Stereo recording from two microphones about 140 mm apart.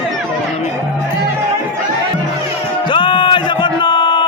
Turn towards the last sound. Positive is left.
turn(degrees=35)  # may be behind; listen again after turning